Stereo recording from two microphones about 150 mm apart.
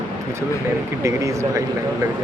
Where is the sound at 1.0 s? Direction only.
20° right (ahead or behind).